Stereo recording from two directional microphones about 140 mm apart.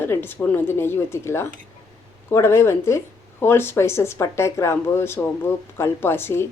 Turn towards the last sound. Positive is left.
turn(degrees=15)  # may be behind; listen again after turning